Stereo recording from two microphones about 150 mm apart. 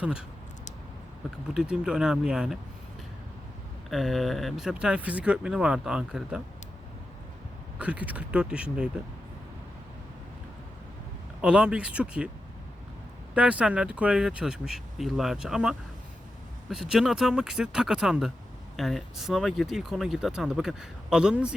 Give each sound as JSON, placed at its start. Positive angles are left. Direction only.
{"t": 0.0, "sound": "speech", "side_deg": -5}
{"t": 1.5, "sound": "speech", "side_deg": -5}
{"t": 3.8, "sound": "speech", "side_deg": 0}
{"t": 7.8, "sound": "speech", "side_deg": -10}
{"t": 11.3, "sound": "speech", "side_deg": -5}
{"t": 13.3, "sound": "speech", "side_deg": -10}